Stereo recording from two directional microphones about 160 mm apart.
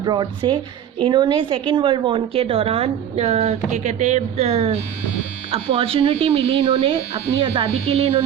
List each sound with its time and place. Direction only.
0.0 s a woman's voice: 25° right (ahead or behind)